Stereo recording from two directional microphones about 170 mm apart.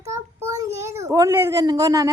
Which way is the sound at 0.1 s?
15° right (ahead or behind).